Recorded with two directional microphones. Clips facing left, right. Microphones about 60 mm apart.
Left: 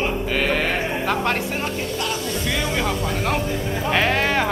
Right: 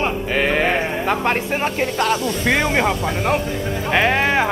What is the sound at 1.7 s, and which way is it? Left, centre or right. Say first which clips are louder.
Speech: right 6 dB; right.